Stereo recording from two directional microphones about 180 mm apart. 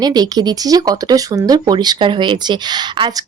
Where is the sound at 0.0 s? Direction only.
20° right (ahead or behind).